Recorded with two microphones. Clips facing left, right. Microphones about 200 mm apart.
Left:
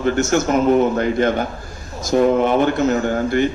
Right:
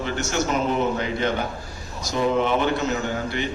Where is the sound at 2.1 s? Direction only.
50° left (ahead or behind).